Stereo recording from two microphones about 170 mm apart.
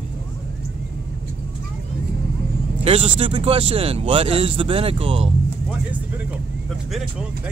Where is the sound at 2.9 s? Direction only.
30° right (ahead or behind).